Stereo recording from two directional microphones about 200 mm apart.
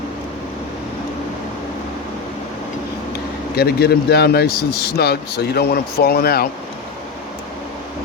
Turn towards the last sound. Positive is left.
turn(degrees=50)  # may be behind; listen again after turning